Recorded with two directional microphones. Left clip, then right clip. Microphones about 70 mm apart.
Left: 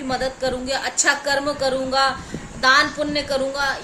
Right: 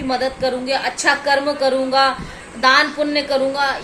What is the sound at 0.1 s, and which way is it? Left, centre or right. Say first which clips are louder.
A woman's voice: right 3 dB; left.